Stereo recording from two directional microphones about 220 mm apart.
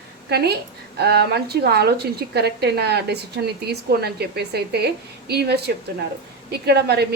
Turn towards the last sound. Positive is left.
turn(degrees=-50)  # may be behind; listen again after turning